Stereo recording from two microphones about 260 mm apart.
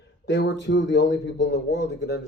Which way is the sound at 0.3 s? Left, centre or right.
Left.